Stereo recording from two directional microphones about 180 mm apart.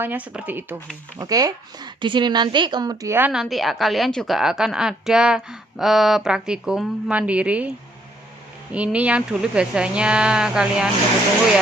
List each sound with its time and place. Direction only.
0.0 s a woman's voice: 10° right (ahead or behind)
8.7 s a woman's voice: 5° right (ahead or behind)